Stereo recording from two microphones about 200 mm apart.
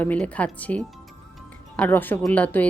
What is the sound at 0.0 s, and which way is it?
Speech, 5° left (ahead or behind).